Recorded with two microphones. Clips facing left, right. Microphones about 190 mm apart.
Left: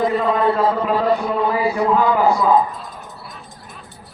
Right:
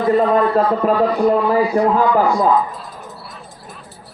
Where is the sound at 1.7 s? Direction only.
40° right (ahead or behind).